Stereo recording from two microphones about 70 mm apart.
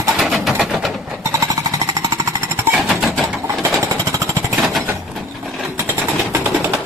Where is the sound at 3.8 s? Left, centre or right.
Right.